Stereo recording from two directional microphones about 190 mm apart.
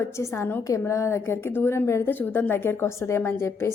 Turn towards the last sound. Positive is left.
turn(degrees=15)  # may be behind; listen again after turning